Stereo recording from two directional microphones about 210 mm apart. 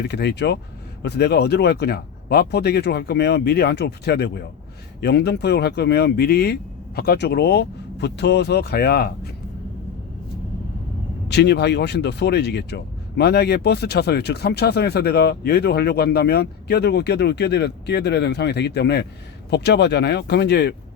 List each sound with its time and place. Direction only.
0.1 s speech: 50° left (ahead or behind)
11.3 s speech: 55° left (ahead or behind)